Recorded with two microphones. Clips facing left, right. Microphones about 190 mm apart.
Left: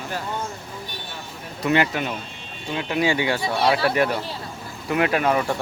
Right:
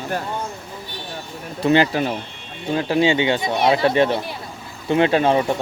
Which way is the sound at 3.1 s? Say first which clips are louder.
Right 4 dB; 20° right (ahead or behind).